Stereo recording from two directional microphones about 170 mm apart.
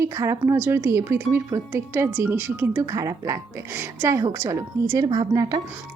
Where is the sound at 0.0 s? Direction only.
15° right (ahead or behind).